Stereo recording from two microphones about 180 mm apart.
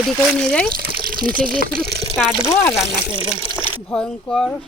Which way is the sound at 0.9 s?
55° right (ahead or behind).